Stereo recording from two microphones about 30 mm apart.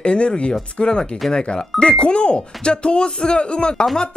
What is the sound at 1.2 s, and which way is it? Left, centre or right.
Speech, centre.